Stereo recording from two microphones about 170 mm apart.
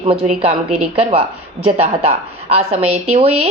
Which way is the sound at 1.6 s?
35° right (ahead or behind).